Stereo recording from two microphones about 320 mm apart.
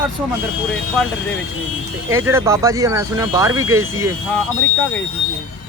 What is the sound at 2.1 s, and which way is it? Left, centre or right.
Speech, centre.